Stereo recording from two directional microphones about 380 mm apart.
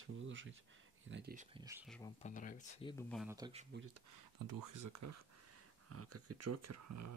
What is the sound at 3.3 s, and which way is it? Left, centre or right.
Speech, centre.